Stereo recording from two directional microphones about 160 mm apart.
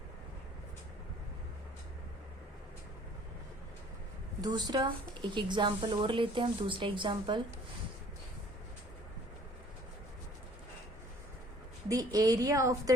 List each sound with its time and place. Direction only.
4.4 s a woman's voice: 25° right (ahead or behind)
11.9 s a woman's voice: 20° right (ahead or behind)